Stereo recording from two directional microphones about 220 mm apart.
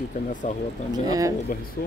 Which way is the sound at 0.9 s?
15° right (ahead or behind).